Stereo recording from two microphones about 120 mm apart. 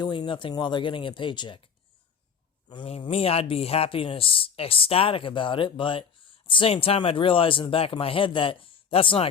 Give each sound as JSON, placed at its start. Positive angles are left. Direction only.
{"t": 0.0, "sound": "speech", "side_deg": 40}
{"t": 3.0, "sound": "speech", "side_deg": 55}